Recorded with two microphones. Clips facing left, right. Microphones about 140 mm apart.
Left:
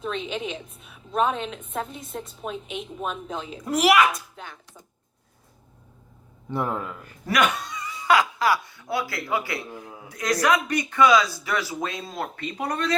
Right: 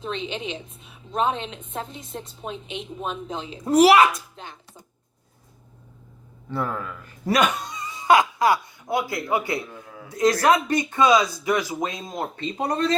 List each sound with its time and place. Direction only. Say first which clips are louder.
0.0 s a woman's voice: even; centre (ahead or behind)
3.6 s a child's voice: right 5 dB; 30° right (ahead or behind)
6.5 s a man's voice: left 1 dB; 20° left (ahead or behind)
7.3 s speech: right 2 dB; 20° right (ahead or behind)
9.6 s a man's voice: left 2 dB; 20° left (ahead or behind)
10.1 s speech: right 4 dB; 25° right (ahead or behind)